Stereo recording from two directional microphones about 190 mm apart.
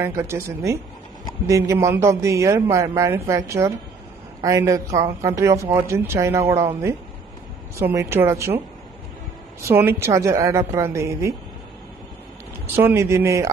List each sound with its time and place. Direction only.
0.0 s speech: 15° right (ahead or behind)
12.7 s speech: 15° right (ahead or behind)